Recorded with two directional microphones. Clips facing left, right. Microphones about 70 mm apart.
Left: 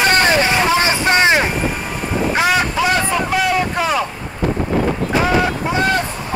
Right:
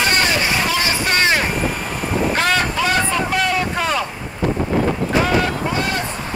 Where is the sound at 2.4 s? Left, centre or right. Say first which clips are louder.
Left 5 dB; centre.